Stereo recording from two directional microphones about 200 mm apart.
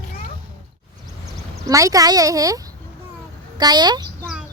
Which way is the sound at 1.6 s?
15° right (ahead or behind).